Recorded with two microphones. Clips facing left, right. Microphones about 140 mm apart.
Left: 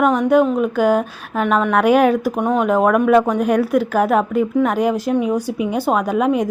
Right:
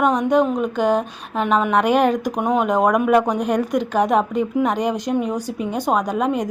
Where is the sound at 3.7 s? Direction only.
5° left (ahead or behind).